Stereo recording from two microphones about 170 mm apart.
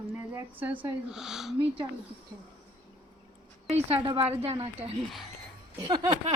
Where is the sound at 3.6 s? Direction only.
40° right (ahead or behind).